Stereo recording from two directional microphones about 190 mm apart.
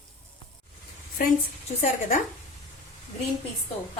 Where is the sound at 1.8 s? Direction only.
45° left (ahead or behind).